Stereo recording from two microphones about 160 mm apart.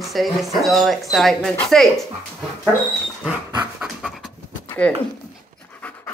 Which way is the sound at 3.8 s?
Centre (ahead or behind).